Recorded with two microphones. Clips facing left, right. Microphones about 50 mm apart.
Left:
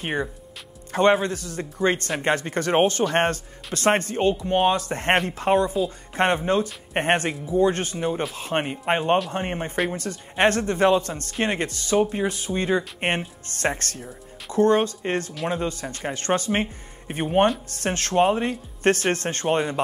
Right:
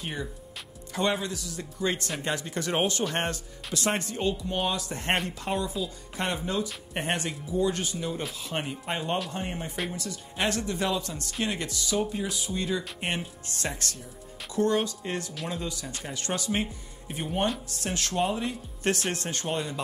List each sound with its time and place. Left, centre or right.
0.0 s speech: left